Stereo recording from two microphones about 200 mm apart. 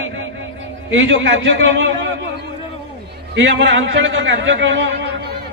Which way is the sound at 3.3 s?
60° right (ahead or behind).